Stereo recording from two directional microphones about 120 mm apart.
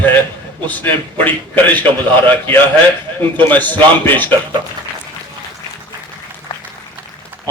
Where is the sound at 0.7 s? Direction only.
15° left (ahead or behind).